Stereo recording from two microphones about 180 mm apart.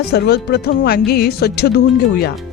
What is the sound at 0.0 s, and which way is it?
Speech, 65° left (ahead or behind).